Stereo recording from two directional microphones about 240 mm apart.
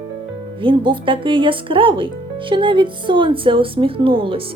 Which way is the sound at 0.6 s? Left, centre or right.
Right.